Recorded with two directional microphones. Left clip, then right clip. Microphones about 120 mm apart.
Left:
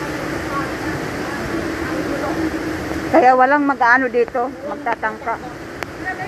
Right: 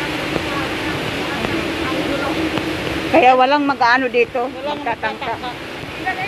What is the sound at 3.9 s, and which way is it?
Speech, 15° right (ahead or behind).